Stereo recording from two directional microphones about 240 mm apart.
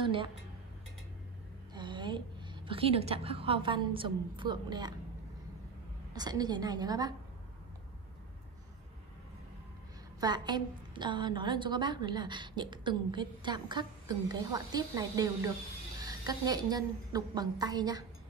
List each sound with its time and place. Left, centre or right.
0.0 s music: right
1.7 s a woman's voice: centre
6.1 s a woman's voice: centre
10.2 s a woman's voice: centre